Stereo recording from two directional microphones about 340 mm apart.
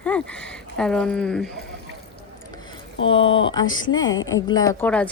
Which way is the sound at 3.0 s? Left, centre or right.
Centre.